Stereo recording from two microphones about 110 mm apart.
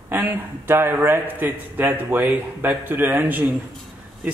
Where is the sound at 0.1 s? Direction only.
20° right (ahead or behind).